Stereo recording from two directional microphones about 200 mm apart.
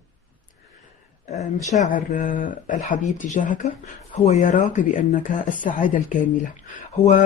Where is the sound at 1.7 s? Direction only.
40° left (ahead or behind).